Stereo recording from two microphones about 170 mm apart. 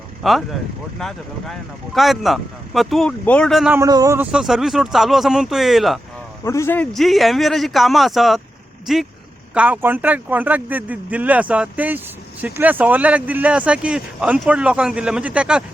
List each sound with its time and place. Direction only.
0.2 s speech: centre (ahead or behind)
3.8 s speech: 20° right (ahead or behind)
4.3 s speech: 5° right (ahead or behind)
6.4 s a man's voice: 15° left (ahead or behind)
6.9 s speech: centre (ahead or behind)